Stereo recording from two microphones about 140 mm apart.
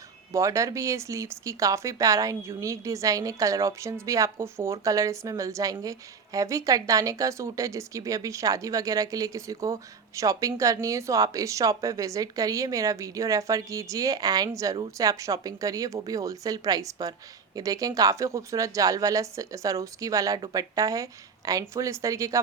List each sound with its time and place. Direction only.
0.3 s speech: 20° right (ahead or behind)